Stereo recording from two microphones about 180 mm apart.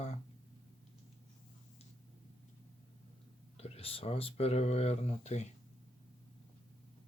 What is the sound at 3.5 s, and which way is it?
Speech, 35° left (ahead or behind).